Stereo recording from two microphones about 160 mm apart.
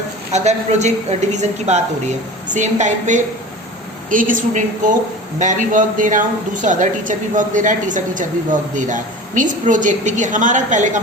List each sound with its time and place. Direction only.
0.3 s a woman's voice: 45° right (ahead or behind)